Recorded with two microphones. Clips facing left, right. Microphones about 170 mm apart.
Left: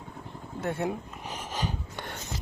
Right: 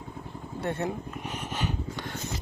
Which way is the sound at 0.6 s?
5° left (ahead or behind).